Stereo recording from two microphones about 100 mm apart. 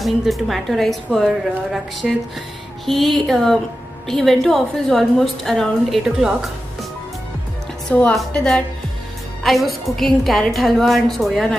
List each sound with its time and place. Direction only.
0.0 s a woman's voice: centre (ahead or behind)
7.9 s a woman's voice: 15° left (ahead or behind)
9.4 s a woman's voice: centre (ahead or behind)